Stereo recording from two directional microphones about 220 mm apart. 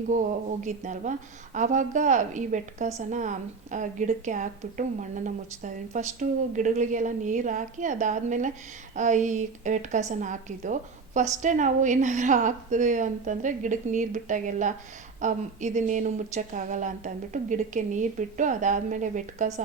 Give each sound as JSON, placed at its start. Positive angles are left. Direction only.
{"t": 0.1, "sound": "a woman's voice", "side_deg": -35}